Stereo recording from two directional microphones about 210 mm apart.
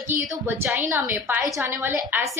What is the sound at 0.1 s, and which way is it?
A woman's voice, 10° right (ahead or behind).